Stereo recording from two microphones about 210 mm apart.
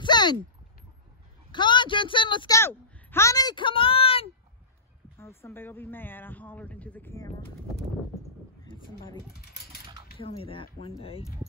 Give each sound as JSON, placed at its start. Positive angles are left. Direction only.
{"t": 0.0, "sound": "a sound", "side_deg": 20}
{"t": 1.5, "sound": "speech", "side_deg": 20}
{"t": 5.2, "sound": "speech", "side_deg": 10}
{"t": 8.6, "sound": "speech", "side_deg": 25}
{"t": 10.1, "sound": "speech", "side_deg": 25}